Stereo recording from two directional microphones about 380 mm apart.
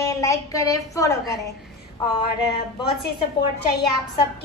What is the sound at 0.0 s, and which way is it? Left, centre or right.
A woman's voice, centre.